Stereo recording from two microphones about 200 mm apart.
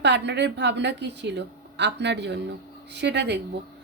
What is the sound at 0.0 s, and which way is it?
A woman's voice, 60° right (ahead or behind).